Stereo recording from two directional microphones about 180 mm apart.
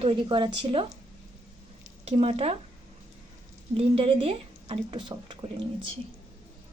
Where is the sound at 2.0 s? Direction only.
35° right (ahead or behind).